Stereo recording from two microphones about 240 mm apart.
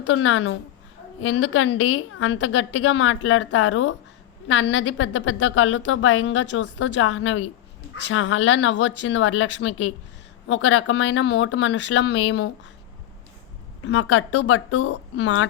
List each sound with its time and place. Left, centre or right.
0.0 s a woman's voice: left
13.8 s a woman's voice: left